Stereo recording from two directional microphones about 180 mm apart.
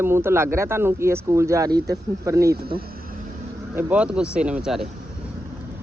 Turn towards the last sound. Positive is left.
turn(degrees=0)  # may be behind; listen again after turning